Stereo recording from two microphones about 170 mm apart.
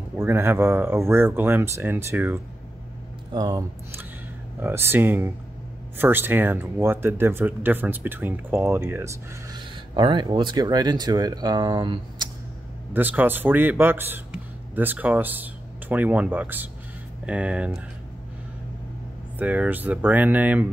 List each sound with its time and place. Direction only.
0.1 s speech: 15° right (ahead or behind)
3.3 s speech: 25° right (ahead or behind)
4.6 s speech: 15° right (ahead or behind)
12.9 s speech: 10° right (ahead or behind)
19.3 s speech: 10° right (ahead or behind)